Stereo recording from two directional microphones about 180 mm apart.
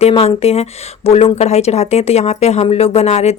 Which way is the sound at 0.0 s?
35° left (ahead or behind).